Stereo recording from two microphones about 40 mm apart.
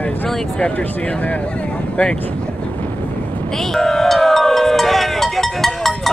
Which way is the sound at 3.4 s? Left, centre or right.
Centre.